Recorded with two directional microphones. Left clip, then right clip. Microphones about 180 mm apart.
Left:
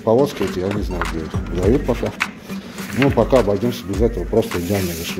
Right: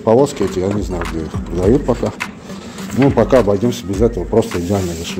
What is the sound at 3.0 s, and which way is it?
Speech, 15° right (ahead or behind).